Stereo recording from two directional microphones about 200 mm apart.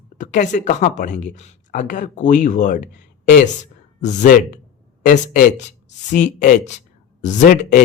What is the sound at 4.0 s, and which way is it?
Speech, 40° left (ahead or behind).